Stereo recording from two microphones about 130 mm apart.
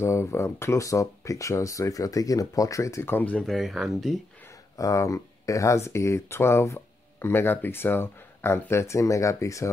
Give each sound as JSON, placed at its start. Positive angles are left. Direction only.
{"t": 0.0, "sound": "speech", "side_deg": 20}
{"t": 3.4, "sound": "speech", "side_deg": 0}
{"t": 4.7, "sound": "speech", "side_deg": 25}